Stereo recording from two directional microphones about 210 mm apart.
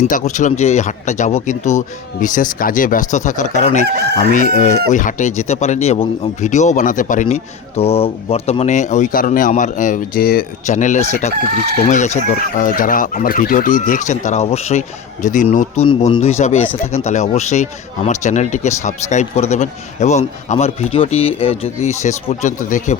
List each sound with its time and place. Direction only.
0.0 s speech: 35° left (ahead or behind)
3.8 s chicken: 50° right (ahead or behind)
4.3 s speech: 40° left (ahead or behind)